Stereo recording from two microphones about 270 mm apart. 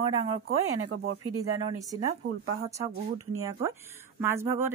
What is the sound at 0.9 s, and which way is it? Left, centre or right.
Speech, right.